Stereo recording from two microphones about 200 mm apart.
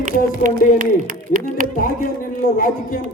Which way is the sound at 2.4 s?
45° left (ahead or behind).